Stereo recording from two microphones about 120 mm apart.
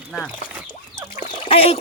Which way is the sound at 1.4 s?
55° left (ahead or behind).